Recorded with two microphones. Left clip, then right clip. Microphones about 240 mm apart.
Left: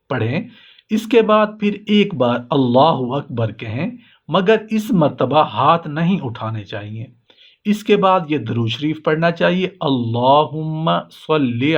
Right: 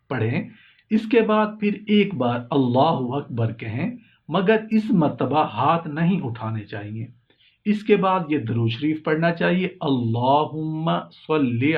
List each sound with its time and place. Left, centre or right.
0.1 s speech: left